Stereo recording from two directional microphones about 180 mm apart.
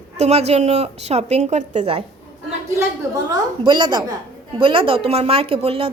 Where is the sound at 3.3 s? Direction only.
25° right (ahead or behind).